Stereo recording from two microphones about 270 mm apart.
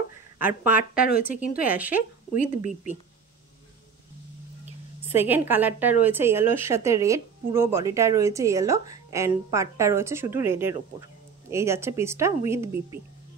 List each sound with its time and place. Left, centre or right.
0.4 s speech: centre
1.0 s speech: left
1.7 s speech: centre
2.0 s speech: left
5.0 s a woman's voice: centre